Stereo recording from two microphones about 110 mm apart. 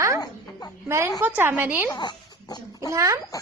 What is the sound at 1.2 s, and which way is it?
Speech, 15° right (ahead or behind).